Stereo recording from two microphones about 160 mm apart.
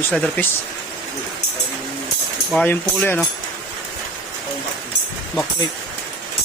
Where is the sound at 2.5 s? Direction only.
10° left (ahead or behind).